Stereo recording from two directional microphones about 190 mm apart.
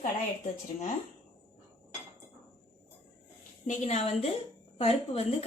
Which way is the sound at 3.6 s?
35° left (ahead or behind).